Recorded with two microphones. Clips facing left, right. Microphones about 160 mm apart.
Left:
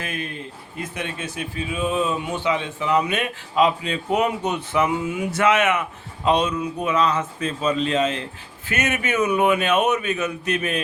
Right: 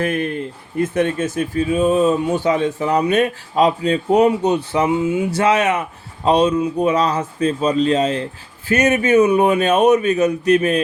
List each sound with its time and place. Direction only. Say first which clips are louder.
0.0 s a man's voice: right 10 dB; 55° right (ahead or behind); by 10.8 s 35° right (ahead or behind)